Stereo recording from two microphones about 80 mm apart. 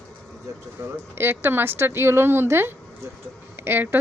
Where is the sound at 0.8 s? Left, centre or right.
Right.